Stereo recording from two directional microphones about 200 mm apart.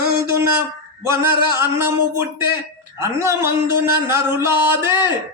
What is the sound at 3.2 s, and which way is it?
Music, 15° right (ahead or behind).